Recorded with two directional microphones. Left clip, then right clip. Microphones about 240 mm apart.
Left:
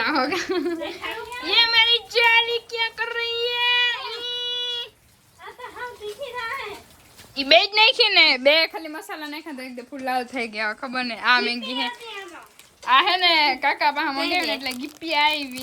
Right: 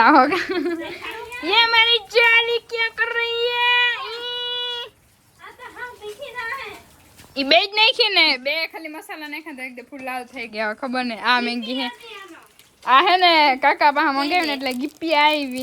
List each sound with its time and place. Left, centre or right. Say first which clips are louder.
0.0 s a sound: right 9 dB; centre
6.1 s a sound: even; centre
7.3 s a woman's voice: even; centre
8.4 s a woman's voice: left 6 dB; left
9.0 s a woman's voice: right 1 dB; centre
10.5 s a woman's voice: right 7 dB; centre